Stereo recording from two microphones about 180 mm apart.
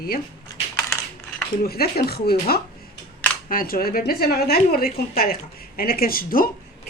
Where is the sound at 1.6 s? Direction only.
60° left (ahead or behind).